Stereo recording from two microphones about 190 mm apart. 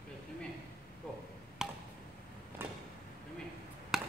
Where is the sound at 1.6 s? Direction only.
5° right (ahead or behind).